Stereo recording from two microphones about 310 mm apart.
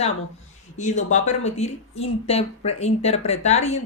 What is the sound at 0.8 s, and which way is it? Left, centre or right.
Speech, left.